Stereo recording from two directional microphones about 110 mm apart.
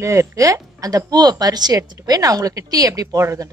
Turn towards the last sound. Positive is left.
turn(degrees=-30)  # may be behind; listen again after turning